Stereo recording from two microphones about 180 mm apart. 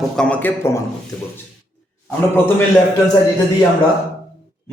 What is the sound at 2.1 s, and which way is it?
Speech, 10° left (ahead or behind).